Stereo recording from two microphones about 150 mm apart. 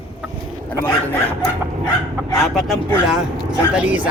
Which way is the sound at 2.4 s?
Centre (ahead or behind).